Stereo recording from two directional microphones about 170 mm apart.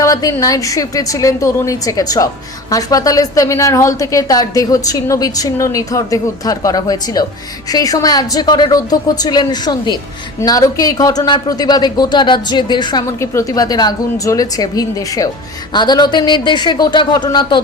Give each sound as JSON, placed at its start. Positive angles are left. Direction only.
{"t": 0.0, "sound": "a woman's voice", "side_deg": 20}